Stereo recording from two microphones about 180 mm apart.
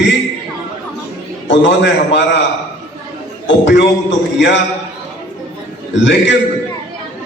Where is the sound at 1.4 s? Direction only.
80° left.